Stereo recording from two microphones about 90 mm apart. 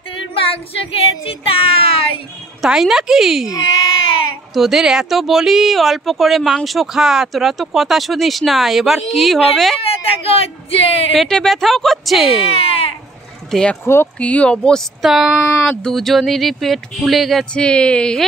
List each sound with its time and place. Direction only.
0.3 s speech: 90° left
2.6 s speech: 5° right (ahead or behind)
4.6 s speech: 5° right (ahead or behind)
9.8 s speech: 90° left
11.1 s speech: 5° left (ahead or behind)
12.4 s baby cry: 90° left
13.5 s speech: 10° left (ahead or behind)
15.0 s speech: 5° right (ahead or behind)